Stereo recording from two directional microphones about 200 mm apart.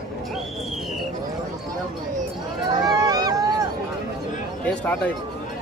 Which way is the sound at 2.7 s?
20° right (ahead or behind).